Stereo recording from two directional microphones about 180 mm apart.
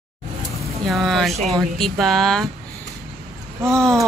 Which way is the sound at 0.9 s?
Centre (ahead or behind).